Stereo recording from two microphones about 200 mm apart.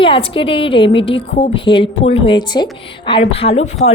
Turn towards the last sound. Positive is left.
turn(degrees=35)  # may be behind; listen again after turning